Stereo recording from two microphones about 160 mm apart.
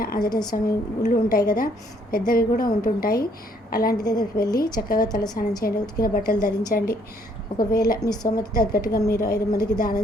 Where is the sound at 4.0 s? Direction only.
25° left (ahead or behind).